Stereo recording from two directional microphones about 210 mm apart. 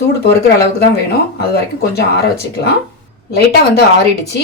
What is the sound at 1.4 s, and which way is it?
Speech, 50° left (ahead or behind).